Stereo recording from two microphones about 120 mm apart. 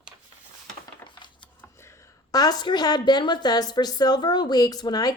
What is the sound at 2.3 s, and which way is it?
A woman's voice, 30° left (ahead or behind).